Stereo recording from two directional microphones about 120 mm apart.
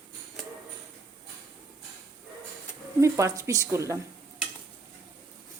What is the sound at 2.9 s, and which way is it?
Speech, 25° right (ahead or behind).